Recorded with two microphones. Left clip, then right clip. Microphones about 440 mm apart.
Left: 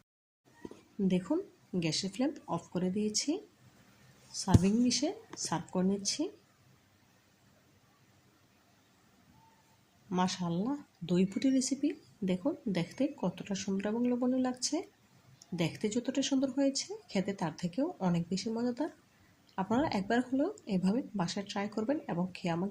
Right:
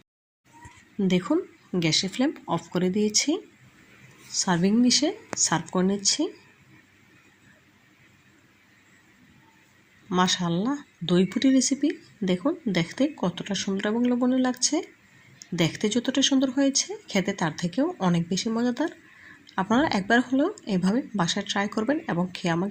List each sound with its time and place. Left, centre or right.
1.0 s speech: right
10.1 s speech: right